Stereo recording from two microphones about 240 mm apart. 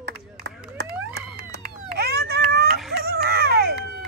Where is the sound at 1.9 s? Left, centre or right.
Right.